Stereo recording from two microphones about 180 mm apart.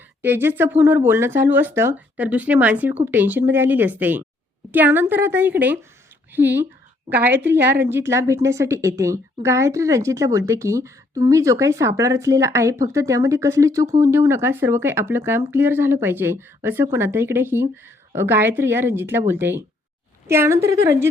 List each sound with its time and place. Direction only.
0.2 s a woman's voice: 10° right (ahead or behind)